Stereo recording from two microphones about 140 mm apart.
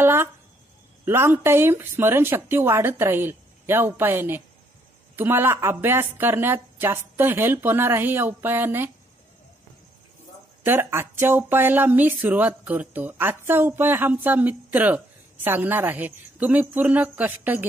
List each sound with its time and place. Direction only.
0.0 s a sound: 15° right (ahead or behind)
1.0 s speech: 15° right (ahead or behind)
10.6 s speech: 15° right (ahead or behind)